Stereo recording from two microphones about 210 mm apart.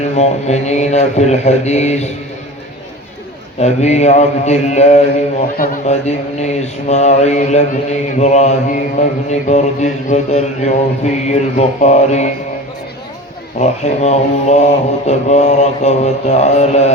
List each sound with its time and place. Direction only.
0.0 s speech: 30° left (ahead or behind)
3.6 s speech: 30° left (ahead or behind)
13.6 s speech: 30° left (ahead or behind)